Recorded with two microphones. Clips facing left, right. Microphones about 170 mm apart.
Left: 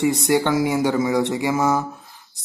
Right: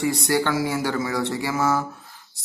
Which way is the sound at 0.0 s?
20° left (ahead or behind).